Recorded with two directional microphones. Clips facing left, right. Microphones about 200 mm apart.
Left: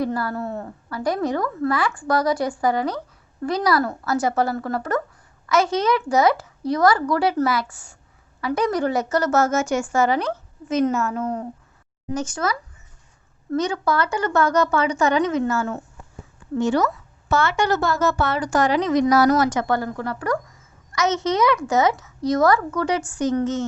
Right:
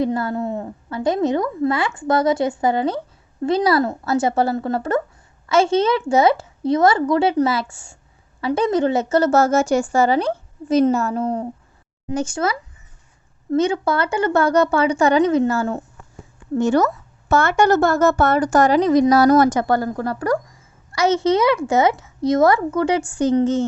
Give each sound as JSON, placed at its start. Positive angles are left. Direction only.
{"t": 0.0, "sound": "a woman's voice", "side_deg": -20}
{"t": 16.6, "sound": "a woman's voice", "side_deg": -45}